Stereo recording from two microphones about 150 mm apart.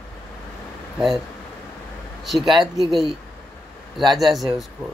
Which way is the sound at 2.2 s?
Centre (ahead or behind).